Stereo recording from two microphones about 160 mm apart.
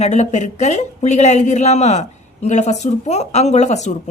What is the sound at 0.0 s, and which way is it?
Speech, 45° left (ahead or behind).